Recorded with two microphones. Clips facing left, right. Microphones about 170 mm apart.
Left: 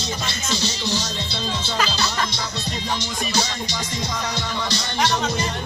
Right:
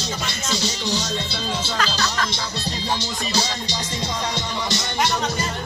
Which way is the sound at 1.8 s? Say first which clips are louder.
Left 2 dB; 5° left (ahead or behind).